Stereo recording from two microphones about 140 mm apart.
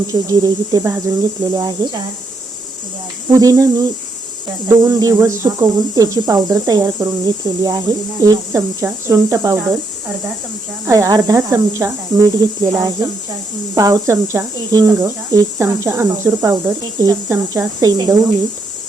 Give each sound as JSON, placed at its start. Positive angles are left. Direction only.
{"t": 0.1, "sound": "speech", "side_deg": -25}
{"t": 3.3, "sound": "speech", "side_deg": -25}
{"t": 4.9, "sound": "speech", "side_deg": -25}
{"t": 10.8, "sound": "speech", "side_deg": -25}